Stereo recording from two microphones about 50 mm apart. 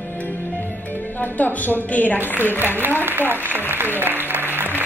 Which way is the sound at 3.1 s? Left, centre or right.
Right.